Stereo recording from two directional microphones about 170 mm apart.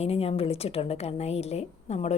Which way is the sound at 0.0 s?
35° left (ahead or behind).